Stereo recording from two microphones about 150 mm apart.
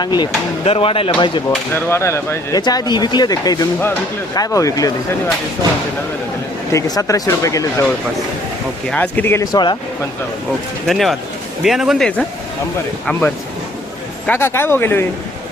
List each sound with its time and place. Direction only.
0.0 s speech: 30° left (ahead or behind)
0.6 s speech: 40° left (ahead or behind)
1.5 s speech: 15° left (ahead or behind)
6.7 s speech: 25° left (ahead or behind)
8.9 s speech: 10° left (ahead or behind)
9.5 s speech: 30° left (ahead or behind)
10.8 s speech: centre (ahead or behind)
14.3 s speech: 15° left (ahead or behind)